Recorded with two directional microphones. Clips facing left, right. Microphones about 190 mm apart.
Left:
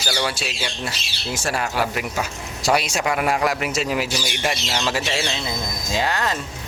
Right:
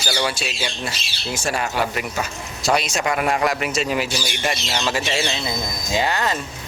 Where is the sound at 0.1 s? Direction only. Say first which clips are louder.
Right 1 dB; centre (ahead or behind).